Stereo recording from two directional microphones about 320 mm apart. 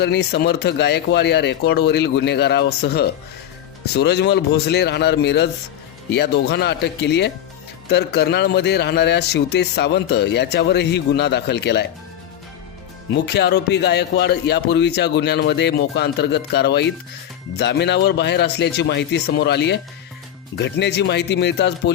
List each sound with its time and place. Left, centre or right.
0.0 s a man's voice: left
13.1 s a man's voice: left